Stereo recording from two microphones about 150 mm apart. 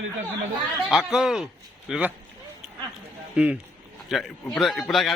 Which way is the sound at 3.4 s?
10° right (ahead or behind).